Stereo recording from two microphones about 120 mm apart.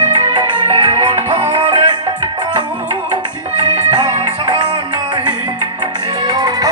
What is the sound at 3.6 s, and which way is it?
Music, 35° right (ahead or behind).